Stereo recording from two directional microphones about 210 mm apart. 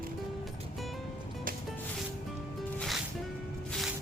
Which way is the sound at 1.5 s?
40° right (ahead or behind).